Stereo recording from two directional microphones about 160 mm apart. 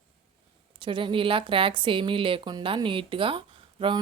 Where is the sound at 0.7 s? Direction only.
30° right (ahead or behind).